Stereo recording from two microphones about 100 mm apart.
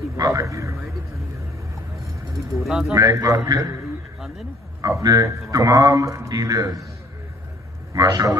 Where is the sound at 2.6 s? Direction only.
Centre (ahead or behind).